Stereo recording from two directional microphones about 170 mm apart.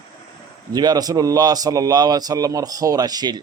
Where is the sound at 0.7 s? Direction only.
25° right (ahead or behind).